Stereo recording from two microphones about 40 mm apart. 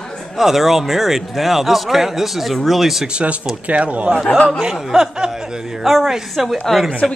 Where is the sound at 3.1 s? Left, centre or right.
Right.